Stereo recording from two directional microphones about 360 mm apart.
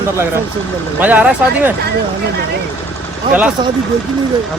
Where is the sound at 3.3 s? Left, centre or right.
Centre.